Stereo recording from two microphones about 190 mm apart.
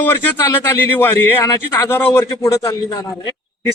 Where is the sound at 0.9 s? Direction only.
15° left (ahead or behind).